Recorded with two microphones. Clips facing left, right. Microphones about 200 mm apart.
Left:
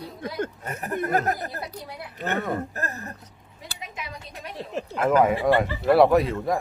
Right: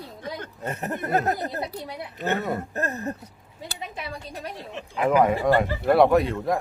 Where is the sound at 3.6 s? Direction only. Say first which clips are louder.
Right 3 dB; 30° right (ahead or behind).